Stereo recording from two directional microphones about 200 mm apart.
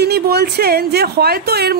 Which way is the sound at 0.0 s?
55° right (ahead or behind).